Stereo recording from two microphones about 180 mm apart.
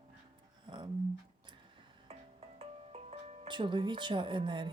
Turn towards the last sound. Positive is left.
turn(degrees=-25)  # may be behind; listen again after turning